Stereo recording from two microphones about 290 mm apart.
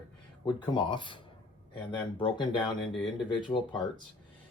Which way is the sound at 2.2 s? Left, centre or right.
Centre.